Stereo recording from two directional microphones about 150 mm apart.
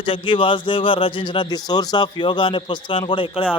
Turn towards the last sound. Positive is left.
turn(degrees=35)  # may be behind; listen again after turning